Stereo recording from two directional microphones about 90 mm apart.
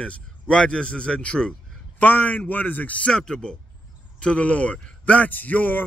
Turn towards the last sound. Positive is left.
turn(degrees=20)  # may be behind; listen again after turning